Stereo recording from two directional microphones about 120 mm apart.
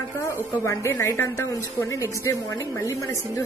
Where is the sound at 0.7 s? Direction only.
25° left (ahead or behind).